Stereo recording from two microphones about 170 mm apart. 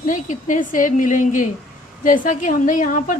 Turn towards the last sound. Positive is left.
turn(degrees=50)  # may be behind; listen again after turning